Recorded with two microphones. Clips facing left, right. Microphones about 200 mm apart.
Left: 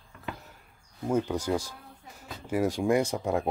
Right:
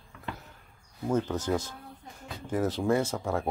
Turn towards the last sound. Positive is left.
turn(degrees=15)  # may be behind; listen again after turning